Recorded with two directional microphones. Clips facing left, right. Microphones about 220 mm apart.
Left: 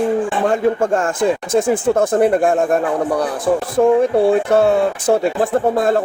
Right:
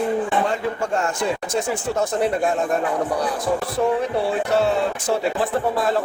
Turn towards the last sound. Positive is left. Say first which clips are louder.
# left 6 dB
turn(degrees=50)  # may be behind; listen again after turning